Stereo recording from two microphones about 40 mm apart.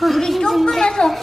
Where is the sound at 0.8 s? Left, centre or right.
Centre.